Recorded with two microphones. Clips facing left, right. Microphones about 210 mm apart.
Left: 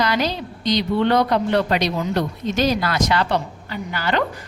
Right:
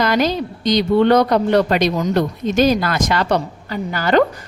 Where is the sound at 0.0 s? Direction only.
50° right (ahead or behind).